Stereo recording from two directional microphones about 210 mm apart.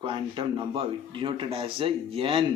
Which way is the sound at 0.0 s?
25° right (ahead or behind).